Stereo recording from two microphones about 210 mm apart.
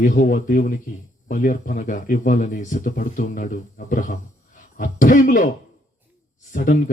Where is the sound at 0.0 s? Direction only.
40° left (ahead or behind).